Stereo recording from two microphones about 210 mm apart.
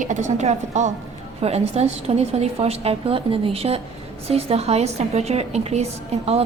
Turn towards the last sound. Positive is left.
turn(degrees=-30)  # may be behind; listen again after turning